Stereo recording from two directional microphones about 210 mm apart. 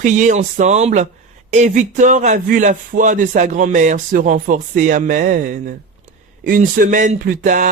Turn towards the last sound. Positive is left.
turn(degrees=-35)  # may be behind; listen again after turning